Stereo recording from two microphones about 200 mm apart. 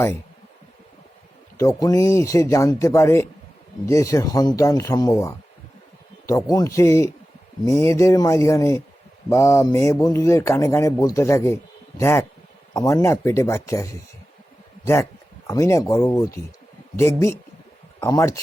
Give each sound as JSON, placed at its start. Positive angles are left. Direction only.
{"t": 1.5, "sound": "speech", "side_deg": 15}
{"t": 15.4, "sound": "speech", "side_deg": 15}